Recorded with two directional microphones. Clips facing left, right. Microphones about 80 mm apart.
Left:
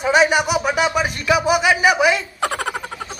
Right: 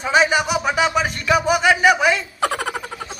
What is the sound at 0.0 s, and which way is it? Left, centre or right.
Music, centre.